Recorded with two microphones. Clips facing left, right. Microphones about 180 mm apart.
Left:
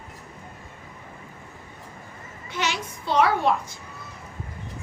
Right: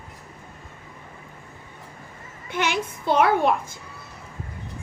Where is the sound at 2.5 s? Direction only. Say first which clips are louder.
Right 4 dB; 55° right (ahead or behind).